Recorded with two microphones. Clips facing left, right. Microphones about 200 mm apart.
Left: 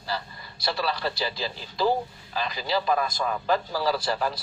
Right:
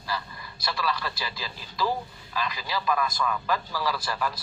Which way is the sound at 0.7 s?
30° left (ahead or behind).